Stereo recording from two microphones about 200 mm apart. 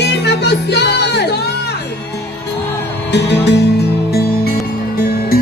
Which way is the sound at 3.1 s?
60° left (ahead or behind).